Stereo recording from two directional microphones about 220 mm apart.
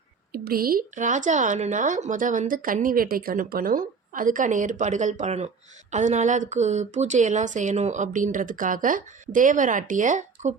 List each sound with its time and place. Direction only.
0.4 s speech: 40° right (ahead or behind)